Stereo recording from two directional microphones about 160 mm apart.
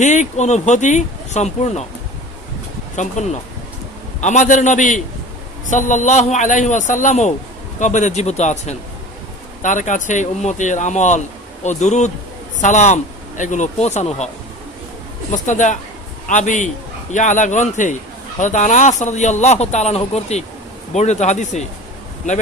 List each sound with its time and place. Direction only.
0.0 s a man's voice: 50° left (ahead or behind)
2.9 s a man's voice: 50° left (ahead or behind)
15.3 s a man's voice: 50° left (ahead or behind)